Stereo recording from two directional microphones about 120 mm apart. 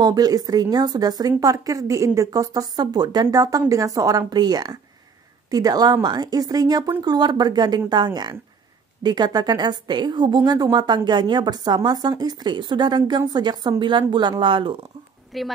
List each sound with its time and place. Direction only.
0.0 s a woman's voice: 35° right (ahead or behind)
15.3 s a woman's voice: centre (ahead or behind)